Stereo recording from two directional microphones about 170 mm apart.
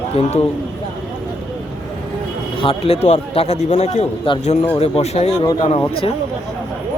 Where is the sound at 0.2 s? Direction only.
40° left (ahead or behind).